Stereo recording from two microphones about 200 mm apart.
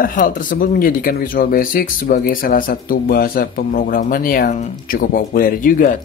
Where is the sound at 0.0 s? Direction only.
40° left (ahead or behind).